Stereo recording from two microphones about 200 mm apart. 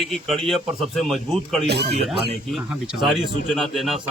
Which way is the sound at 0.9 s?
Centre (ahead or behind).